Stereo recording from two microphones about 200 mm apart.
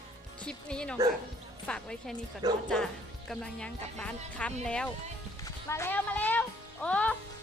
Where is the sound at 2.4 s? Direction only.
20° right (ahead or behind).